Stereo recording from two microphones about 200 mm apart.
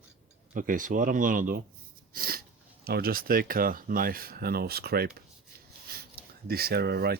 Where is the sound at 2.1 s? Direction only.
45° right (ahead or behind).